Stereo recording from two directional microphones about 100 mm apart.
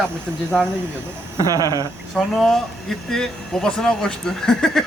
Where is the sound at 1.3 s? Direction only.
35° right (ahead or behind).